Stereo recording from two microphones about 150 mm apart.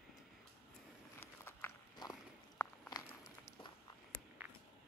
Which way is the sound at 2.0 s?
25° left (ahead or behind).